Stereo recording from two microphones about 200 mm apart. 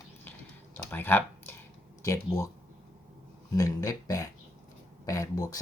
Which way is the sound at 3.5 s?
15° left (ahead or behind).